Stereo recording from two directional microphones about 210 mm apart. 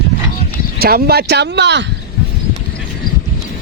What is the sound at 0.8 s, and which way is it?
Speech, 45° right (ahead or behind).